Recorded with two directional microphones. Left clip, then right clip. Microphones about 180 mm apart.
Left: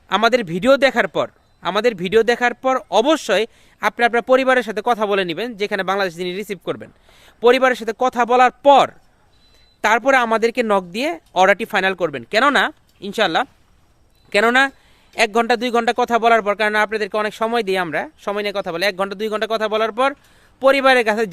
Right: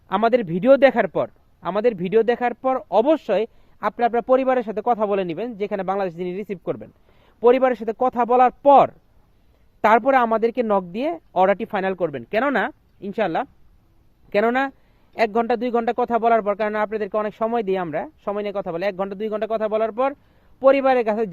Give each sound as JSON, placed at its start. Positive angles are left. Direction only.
{"t": 0.1, "sound": "a man's voice", "side_deg": 10}